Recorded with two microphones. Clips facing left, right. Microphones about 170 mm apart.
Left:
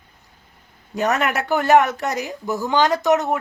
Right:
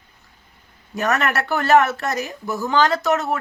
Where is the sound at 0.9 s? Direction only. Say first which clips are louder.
Left 1 dB; 20° left (ahead or behind).